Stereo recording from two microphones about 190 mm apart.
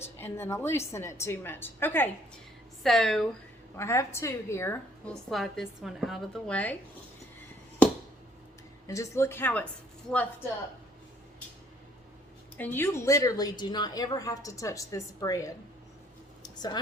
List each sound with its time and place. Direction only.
0.0 s a woman's voice: 10° left (ahead or behind)
3.8 s a woman's voice: 15° left (ahead or behind)
5.3 s a woman's voice: centre (ahead or behind)
8.9 s a woman's voice: 15° left (ahead or behind)
12.5 s a woman's voice: 10° left (ahead or behind)
16.4 s a sound: 20° left (ahead or behind)